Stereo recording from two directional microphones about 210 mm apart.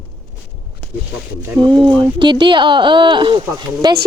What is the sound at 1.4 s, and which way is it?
Speech, 15° right (ahead or behind).